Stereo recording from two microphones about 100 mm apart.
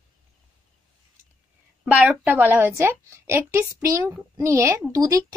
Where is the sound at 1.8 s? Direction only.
10° right (ahead or behind).